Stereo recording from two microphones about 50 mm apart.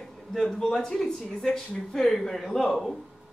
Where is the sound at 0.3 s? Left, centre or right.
Centre.